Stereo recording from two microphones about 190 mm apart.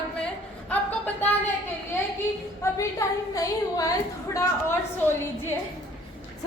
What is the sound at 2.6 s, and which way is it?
Speech, 15° left (ahead or behind).